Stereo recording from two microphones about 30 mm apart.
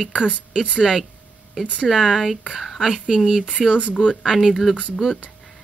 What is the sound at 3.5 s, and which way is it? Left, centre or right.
Speech, right.